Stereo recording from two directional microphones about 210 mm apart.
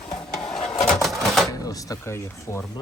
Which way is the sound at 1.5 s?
15° left (ahead or behind).